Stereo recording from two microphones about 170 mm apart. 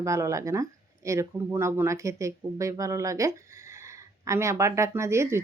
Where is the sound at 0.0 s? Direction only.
15° right (ahead or behind).